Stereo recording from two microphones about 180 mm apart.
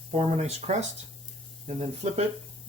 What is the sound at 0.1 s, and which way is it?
Speech, 35° right (ahead or behind).